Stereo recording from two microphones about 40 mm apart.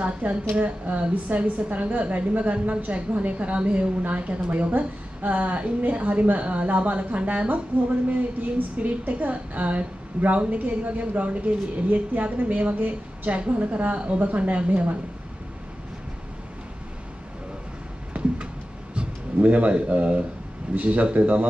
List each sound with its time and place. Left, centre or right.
0.0 s a woman's voice: right
18.1 s a sound: right
19.4 s a woman's voice: right